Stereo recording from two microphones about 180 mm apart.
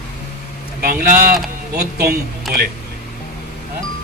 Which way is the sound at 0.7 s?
50° right (ahead or behind).